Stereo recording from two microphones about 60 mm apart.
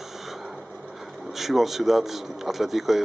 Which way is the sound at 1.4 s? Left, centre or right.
Centre.